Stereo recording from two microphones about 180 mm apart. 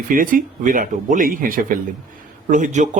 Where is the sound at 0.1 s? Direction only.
50° right (ahead or behind).